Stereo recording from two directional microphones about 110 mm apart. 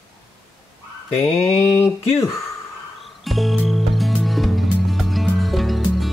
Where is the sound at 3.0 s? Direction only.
Centre (ahead or behind).